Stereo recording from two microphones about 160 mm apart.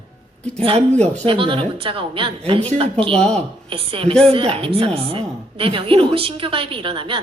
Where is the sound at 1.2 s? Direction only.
35° right (ahead or behind).